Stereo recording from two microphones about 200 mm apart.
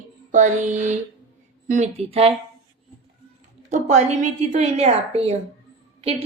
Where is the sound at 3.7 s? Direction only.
35° right (ahead or behind).